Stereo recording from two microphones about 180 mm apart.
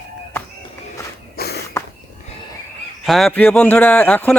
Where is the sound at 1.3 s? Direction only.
60° left (ahead or behind).